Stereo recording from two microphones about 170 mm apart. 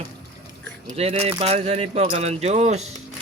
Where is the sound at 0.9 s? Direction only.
35° right (ahead or behind).